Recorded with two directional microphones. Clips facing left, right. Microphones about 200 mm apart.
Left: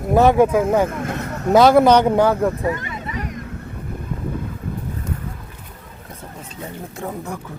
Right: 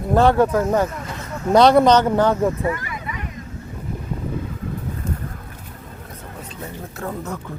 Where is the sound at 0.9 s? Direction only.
55° left (ahead or behind).